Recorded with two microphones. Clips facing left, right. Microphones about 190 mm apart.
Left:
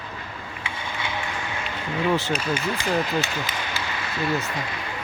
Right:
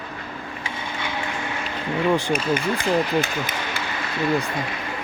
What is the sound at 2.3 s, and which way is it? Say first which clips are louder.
Speech: right 3 dB; 50° right (ahead or behind).